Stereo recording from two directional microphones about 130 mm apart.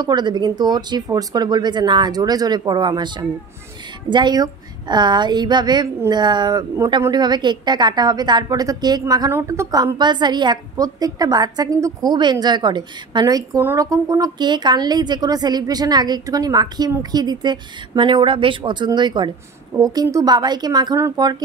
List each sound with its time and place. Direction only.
0.0 s a woman's voice: 35° right (ahead or behind)